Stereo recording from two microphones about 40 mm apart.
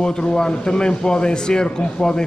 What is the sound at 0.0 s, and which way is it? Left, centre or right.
A man's voice, centre.